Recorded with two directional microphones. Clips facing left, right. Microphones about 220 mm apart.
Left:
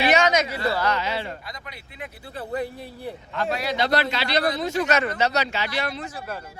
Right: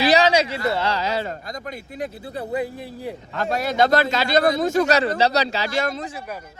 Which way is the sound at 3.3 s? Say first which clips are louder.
Right 4 dB; 45° right (ahead or behind).